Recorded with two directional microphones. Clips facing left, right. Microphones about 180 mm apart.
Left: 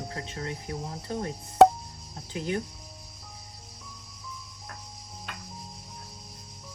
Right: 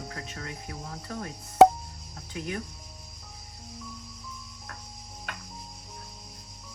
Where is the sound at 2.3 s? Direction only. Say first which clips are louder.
Left 4 dB; 30° left (ahead or behind).